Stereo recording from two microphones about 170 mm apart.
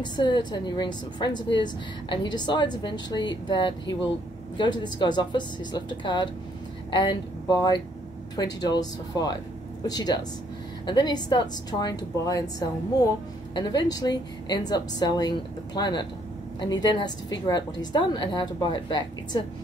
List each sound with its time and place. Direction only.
0.0 s a woman's voice: 25° left (ahead or behind)